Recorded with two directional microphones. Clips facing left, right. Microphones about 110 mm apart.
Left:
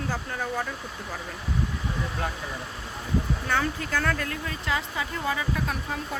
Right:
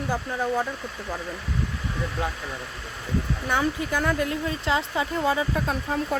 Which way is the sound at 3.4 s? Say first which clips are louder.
Right 2 dB; 15° right (ahead or behind).